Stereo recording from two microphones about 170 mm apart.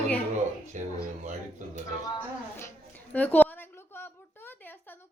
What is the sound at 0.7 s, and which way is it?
Speech, 45° right (ahead or behind).